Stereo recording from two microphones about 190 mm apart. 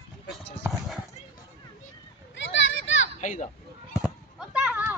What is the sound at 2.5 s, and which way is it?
Children playing, 80° left.